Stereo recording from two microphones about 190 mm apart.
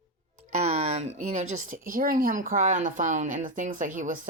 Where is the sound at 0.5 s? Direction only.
35° right (ahead or behind).